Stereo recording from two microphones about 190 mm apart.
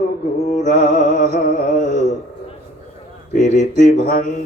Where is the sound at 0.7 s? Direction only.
35° right (ahead or behind).